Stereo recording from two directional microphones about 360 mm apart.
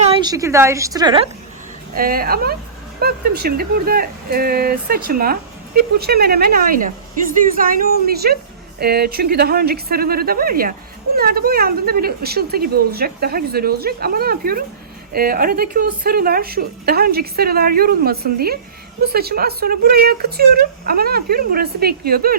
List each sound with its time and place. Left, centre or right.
0.0 s a woman's voice: centre
2.0 s a woman's voice: right